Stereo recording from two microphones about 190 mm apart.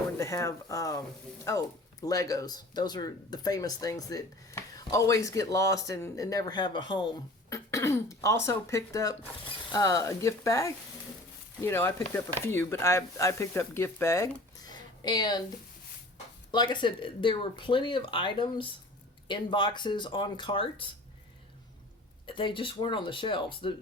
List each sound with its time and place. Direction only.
0.2 s speech: 15° left (ahead or behind)
14.7 s a sound: 20° left (ahead or behind)
16.5 s speech: 25° left (ahead or behind)
22.3 s speech: 25° left (ahead or behind)